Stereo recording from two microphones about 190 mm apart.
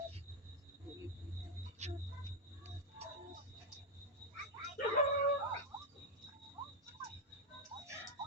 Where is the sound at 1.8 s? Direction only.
35° right (ahead or behind).